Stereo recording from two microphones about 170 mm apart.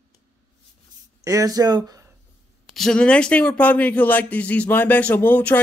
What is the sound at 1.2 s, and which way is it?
Speech, 20° right (ahead or behind).